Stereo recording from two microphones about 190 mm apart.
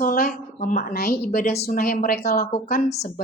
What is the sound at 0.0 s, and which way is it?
A woman's voice, 45° left (ahead or behind).